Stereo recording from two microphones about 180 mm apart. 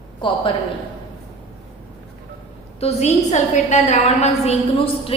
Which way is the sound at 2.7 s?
35° left (ahead or behind).